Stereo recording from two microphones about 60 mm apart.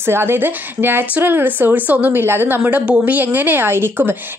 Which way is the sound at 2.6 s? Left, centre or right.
Right.